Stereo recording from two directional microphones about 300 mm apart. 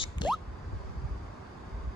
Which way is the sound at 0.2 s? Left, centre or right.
Centre.